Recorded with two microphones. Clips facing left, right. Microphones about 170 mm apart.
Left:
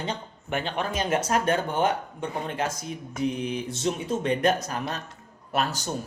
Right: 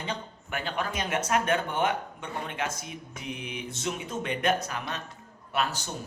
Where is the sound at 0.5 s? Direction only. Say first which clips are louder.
Left 4 dB; 25° left (ahead or behind); by 5.9 s 40° left (ahead or behind).